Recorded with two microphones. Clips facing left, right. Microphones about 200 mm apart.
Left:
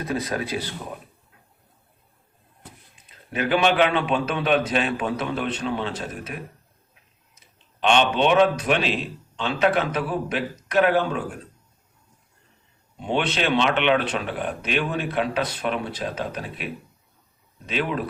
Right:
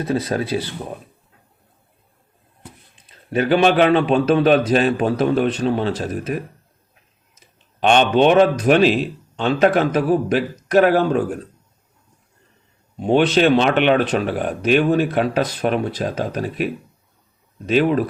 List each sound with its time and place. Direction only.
0.0 s speech: 30° right (ahead or behind)
3.3 s a man's voice: 40° right (ahead or behind)
13.0 s speech: 40° right (ahead or behind)
17.7 s a man's voice: 40° right (ahead or behind)